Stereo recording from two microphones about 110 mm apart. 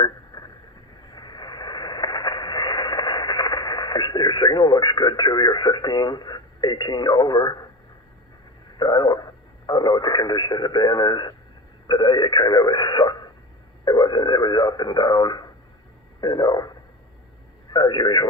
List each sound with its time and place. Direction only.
0.0 s a sound: 40° left (ahead or behind)
1.1 s radio: 40° left (ahead or behind)
8.7 s speech: 40° left (ahead or behind)
17.7 s speech: 40° left (ahead or behind)